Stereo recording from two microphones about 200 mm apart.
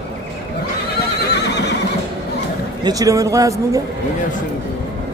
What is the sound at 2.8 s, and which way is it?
Speech, 15° right (ahead or behind).